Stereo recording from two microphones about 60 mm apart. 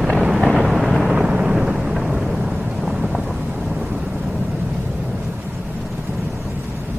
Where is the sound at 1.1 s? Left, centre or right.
Centre.